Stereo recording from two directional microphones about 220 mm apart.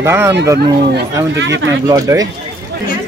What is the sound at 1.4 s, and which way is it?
Speech, 55° right (ahead or behind).